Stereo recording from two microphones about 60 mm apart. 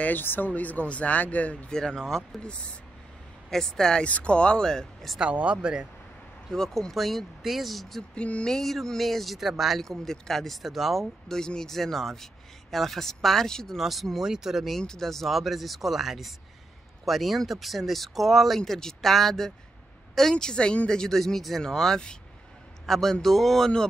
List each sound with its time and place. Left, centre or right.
0.0 s speech: left
1.7 s speech: centre
4.0 s speech: centre
5.2 s speech: right
6.5 s speech: centre
8.1 s speech: centre
8.5 s speech: centre
14.8 s speech: centre
18.6 s speech: centre